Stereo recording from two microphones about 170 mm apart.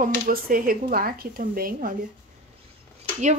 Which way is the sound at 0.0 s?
55° right (ahead or behind).